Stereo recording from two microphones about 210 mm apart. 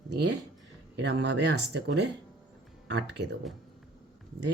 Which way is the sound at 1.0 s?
55° right (ahead or behind).